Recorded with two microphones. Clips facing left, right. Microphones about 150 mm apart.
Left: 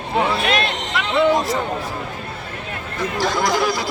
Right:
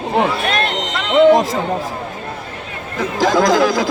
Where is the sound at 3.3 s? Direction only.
90° right.